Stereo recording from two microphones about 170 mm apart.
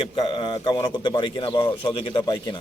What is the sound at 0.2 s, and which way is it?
A man's voice, 30° left (ahead or behind).